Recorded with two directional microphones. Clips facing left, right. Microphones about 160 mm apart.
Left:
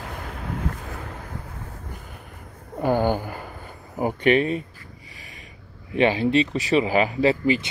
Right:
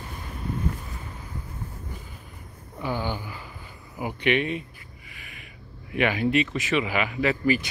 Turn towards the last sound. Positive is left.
turn(degrees=25)  # may be behind; listen again after turning